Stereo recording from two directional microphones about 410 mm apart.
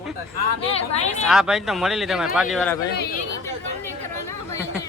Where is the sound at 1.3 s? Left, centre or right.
Centre.